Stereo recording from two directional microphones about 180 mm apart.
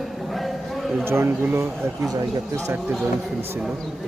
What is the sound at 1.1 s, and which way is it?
Speech, 15° right (ahead or behind).